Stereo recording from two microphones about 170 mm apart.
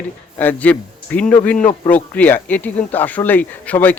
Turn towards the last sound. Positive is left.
turn(degrees=10)  # may be behind; listen again after turning